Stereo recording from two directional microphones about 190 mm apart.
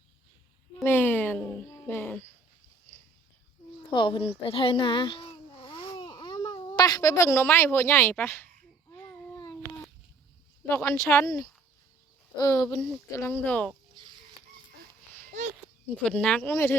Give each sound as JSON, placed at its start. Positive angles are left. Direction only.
{"t": 0.9, "sound": "a sound", "side_deg": 10}
{"t": 3.9, "sound": "a woman's voice", "side_deg": 25}
{"t": 8.9, "sound": "babbling", "side_deg": 10}
{"t": 10.7, "sound": "a woman's voice", "side_deg": 15}
{"t": 14.0, "sound": "rodents", "side_deg": -25}
{"t": 15.4, "sound": "a sound", "side_deg": -40}
{"t": 16.0, "sound": "speech", "side_deg": 5}